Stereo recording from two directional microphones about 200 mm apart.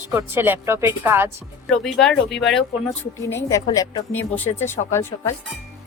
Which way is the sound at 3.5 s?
15° left (ahead or behind).